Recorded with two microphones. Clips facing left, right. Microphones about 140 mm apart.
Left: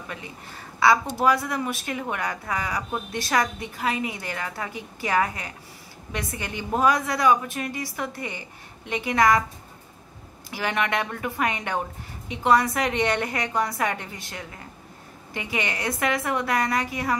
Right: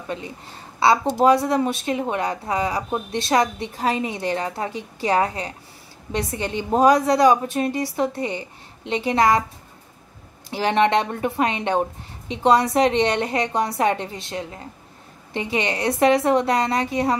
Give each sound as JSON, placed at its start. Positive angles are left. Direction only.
{"t": 0.7, "sound": "a woman's voice", "side_deg": -30}
{"t": 10.5, "sound": "a woman's voice", "side_deg": -30}